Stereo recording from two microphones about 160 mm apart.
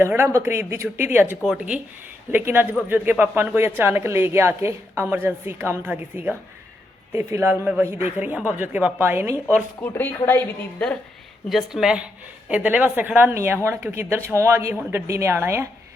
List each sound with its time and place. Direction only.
0.0 s speech: 15° right (ahead or behind)
9.8 s a woman's voice: 15° left (ahead or behind)
11.4 s speech: centre (ahead or behind)